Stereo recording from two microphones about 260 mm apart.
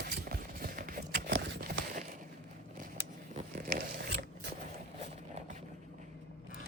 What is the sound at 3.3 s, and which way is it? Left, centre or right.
Zipper, right.